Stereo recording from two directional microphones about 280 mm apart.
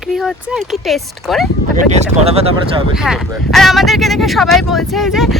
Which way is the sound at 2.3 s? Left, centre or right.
Right.